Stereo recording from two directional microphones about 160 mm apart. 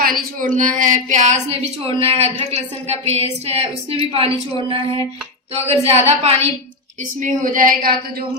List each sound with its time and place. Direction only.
0.0 s a woman's voice: 60° right (ahead or behind); by 4.3 s 35° right (ahead or behind)
5.6 s a woman's voice: 40° right (ahead or behind)
7.2 s a woman's voice: 55° right (ahead or behind)